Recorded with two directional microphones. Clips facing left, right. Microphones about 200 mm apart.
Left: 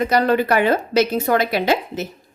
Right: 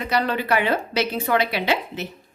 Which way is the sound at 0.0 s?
45° left (ahead or behind).